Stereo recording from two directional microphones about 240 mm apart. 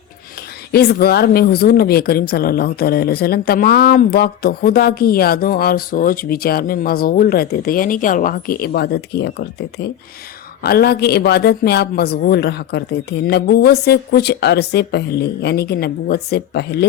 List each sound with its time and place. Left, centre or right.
0.7 s speech: left